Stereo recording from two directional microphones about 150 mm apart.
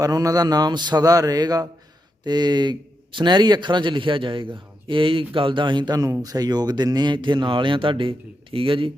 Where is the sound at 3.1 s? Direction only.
30° right (ahead or behind).